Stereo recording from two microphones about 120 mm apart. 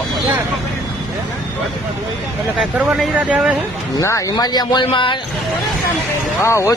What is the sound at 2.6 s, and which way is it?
Speech, 5° right (ahead or behind).